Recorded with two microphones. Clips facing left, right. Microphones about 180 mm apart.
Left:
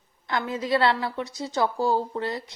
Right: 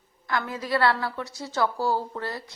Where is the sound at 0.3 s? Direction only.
20° left (ahead or behind).